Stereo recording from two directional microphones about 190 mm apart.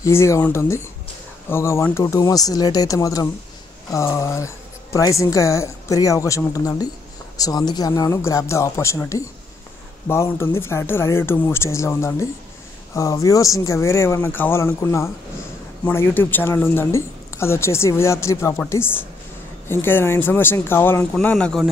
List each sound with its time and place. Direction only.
0.0 s speech: 15° left (ahead or behind)